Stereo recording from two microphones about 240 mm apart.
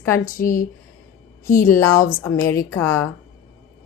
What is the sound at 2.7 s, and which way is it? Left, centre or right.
Speech, centre.